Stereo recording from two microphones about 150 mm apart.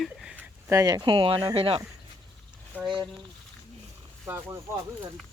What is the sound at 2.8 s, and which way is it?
Speech, centre (ahead or behind).